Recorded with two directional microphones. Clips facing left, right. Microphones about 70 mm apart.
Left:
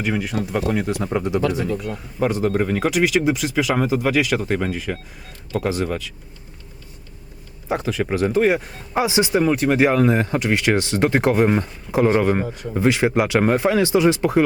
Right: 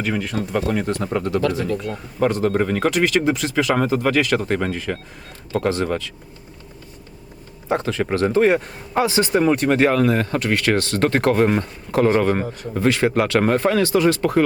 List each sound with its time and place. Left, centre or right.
0.0 s speech: centre
7.7 s speech: centre
9.0 s speech: centre
9.3 s speech: centre